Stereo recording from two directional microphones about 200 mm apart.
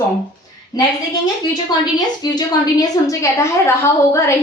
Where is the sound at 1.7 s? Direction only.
20° left (ahead or behind).